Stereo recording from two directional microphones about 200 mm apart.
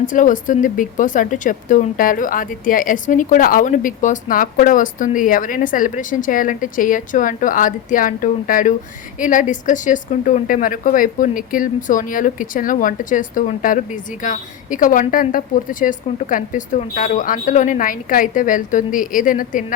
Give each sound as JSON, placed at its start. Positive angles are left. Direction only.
{"t": 0.0, "sound": "speech", "side_deg": 40}